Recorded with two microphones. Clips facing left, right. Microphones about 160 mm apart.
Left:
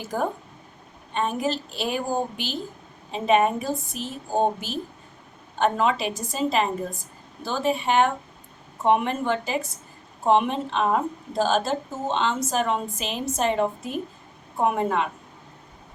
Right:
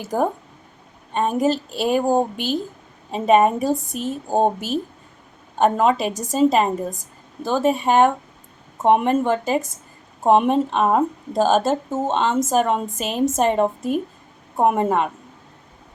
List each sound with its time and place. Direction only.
1.1 s a woman's voice: 45° right (ahead or behind)
5.5 s a woman's voice: 45° right (ahead or behind)